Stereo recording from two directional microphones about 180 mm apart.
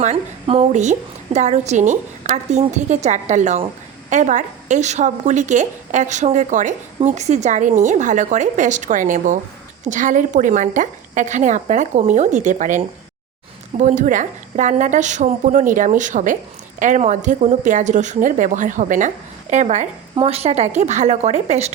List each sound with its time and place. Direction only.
0.0 s a woman's voice: 40° right (ahead or behind)